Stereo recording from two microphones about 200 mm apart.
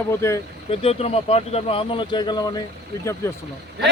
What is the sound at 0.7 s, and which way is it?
Speech, 30° left (ahead or behind).